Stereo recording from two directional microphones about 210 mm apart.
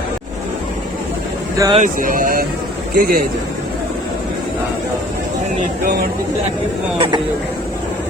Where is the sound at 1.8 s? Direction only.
40° right (ahead or behind).